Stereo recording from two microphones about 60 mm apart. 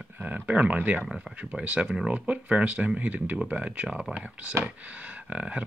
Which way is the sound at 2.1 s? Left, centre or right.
Right.